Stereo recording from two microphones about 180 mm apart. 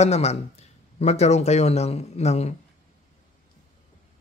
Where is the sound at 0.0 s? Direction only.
35° left (ahead or behind).